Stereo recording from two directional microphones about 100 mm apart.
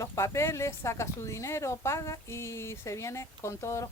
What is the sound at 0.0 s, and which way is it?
Speech, 30° left (ahead or behind).